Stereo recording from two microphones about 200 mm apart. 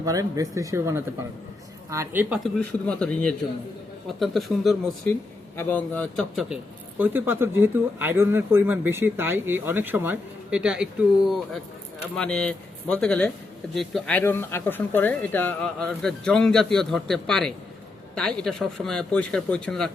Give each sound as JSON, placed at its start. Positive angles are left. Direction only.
{"t": 0.0, "sound": "speech", "side_deg": -15}
{"t": 2.4, "sound": "a man's voice", "side_deg": 5}
{"t": 7.0, "sound": "speech", "side_deg": -10}
{"t": 12.1, "sound": "speech", "side_deg": 5}